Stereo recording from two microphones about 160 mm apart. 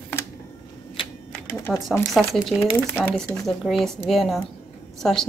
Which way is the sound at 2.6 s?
15° left (ahead or behind).